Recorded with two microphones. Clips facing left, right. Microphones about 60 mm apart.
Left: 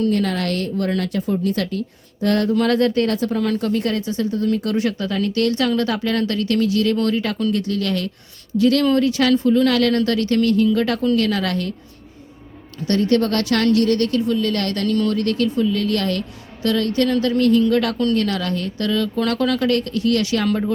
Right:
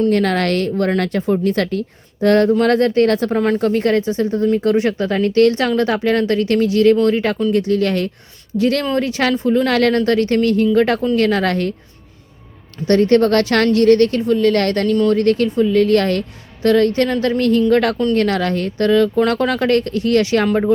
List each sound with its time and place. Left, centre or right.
0.1 s speech: right
12.8 s speech: right